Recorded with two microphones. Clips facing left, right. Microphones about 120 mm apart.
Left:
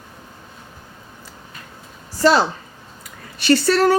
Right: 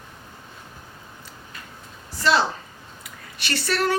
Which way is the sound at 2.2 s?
40° left (ahead or behind).